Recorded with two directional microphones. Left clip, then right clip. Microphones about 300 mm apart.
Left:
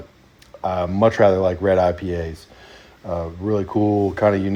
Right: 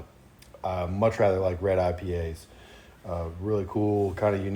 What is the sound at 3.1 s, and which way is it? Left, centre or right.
Speech, left.